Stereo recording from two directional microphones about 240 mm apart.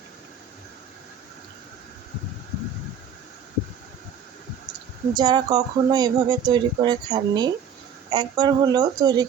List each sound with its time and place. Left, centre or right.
5.1 s speech: centre